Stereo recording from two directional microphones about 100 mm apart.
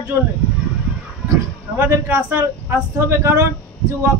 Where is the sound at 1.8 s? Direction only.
25° right (ahead or behind).